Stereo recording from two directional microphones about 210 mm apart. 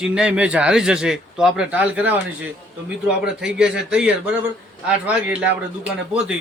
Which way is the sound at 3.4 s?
5° right (ahead or behind).